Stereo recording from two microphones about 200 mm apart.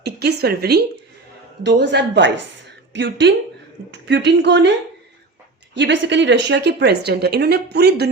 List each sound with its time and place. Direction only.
0.0 s a woman's voice: 55° right (ahead or behind)
5.7 s a woman's voice: 65° right (ahead or behind)